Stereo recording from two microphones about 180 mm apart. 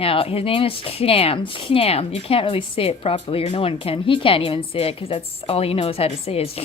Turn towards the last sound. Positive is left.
turn(degrees=35)  # may be behind; listen again after turning